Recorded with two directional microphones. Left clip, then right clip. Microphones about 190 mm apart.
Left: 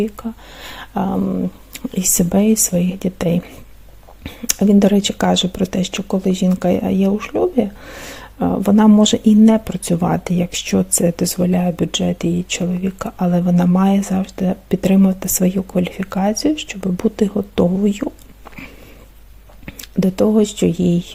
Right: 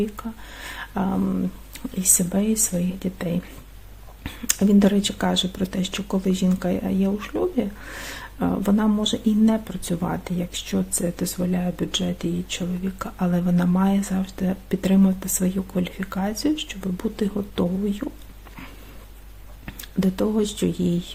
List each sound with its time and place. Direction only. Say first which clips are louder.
0.0 s speech: left 6 dB; 35° left (ahead or behind)
4.2 s speech: left 5 dB; 25° left (ahead or behind)
19.6 s speech: left 6 dB; 30° left (ahead or behind)